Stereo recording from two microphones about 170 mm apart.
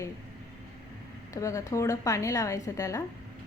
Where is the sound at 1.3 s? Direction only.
20° left (ahead or behind).